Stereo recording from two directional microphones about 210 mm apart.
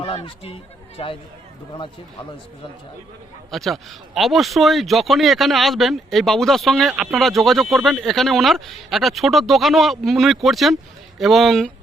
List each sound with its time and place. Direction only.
0.0 s speech: 25° left (ahead or behind)
3.5 s speech: centre (ahead or behind)